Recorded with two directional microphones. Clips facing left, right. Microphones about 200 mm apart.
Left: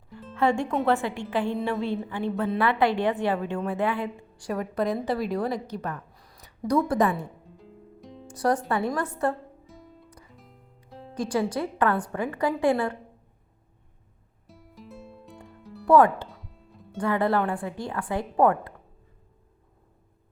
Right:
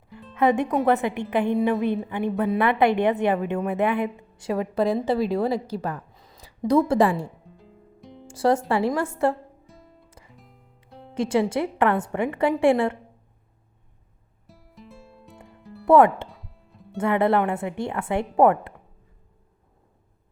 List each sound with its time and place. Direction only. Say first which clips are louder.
0.1 s music: left 1 dB; centre (ahead or behind)
0.3 s a woman's voice: right 3 dB; 20° right (ahead or behind)
7.4 s music: left 2 dB; centre (ahead or behind)
8.3 s a woman's voice: right 4 dB; 25° right (ahead or behind)
9.6 s music: left 2 dB; centre (ahead or behind)
11.1 s a woman's voice: right 4 dB; 25° right (ahead or behind)
14.4 s music: left 1 dB; centre (ahead or behind)
15.9 s a woman's voice: right 2 dB; 25° right (ahead or behind)
16.3 s music: even; centre (ahead or behind)
17.0 s a woman's voice: right 3 dB; 25° right (ahead or behind)